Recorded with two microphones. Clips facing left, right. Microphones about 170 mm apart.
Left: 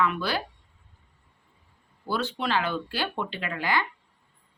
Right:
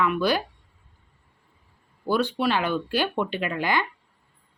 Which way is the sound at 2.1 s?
15° right (ahead or behind).